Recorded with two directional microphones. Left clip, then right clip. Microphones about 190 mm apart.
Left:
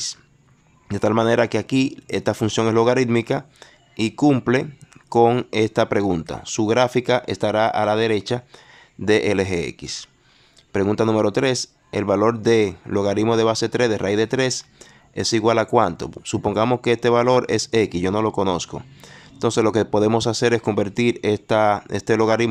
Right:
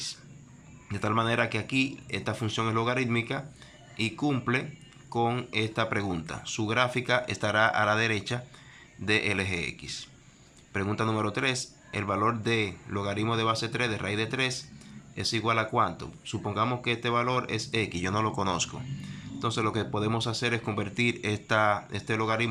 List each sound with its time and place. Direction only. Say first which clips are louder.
0.9 s speech: left 10 dB; 35° left (ahead or behind)